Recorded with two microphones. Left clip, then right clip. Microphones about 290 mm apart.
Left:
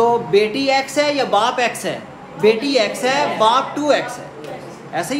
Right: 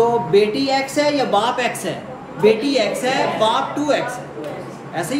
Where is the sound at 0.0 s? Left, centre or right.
Centre.